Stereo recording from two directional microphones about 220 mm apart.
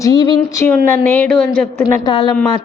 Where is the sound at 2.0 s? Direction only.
20° left (ahead or behind).